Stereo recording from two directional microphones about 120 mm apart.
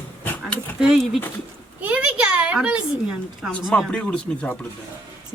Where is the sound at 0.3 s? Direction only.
15° left (ahead or behind).